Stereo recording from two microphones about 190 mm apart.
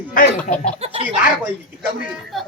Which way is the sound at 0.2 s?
45° left (ahead or behind).